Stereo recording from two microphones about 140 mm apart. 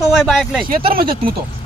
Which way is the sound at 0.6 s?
90° right.